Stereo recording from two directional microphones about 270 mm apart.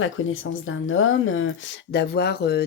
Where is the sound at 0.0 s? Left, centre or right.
Left.